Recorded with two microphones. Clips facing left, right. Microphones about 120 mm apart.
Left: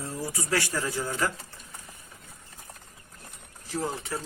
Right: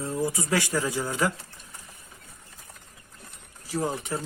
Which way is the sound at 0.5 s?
15° right (ahead or behind).